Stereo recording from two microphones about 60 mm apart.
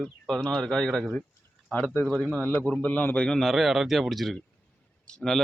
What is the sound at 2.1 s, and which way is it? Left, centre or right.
Speech, centre.